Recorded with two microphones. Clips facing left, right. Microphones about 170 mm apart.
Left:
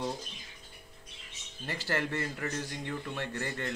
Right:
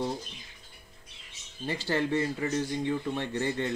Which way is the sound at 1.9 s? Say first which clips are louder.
Right 5 dB; 15° right (ahead or behind).